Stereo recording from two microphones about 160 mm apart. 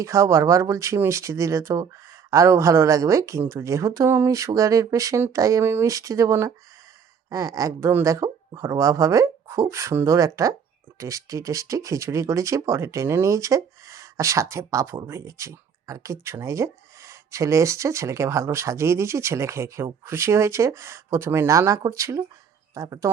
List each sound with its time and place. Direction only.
0.0 s a woman's voice: 20° right (ahead or behind)